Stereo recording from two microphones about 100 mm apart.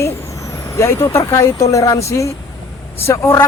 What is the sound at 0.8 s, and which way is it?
Speech, 30° left (ahead or behind).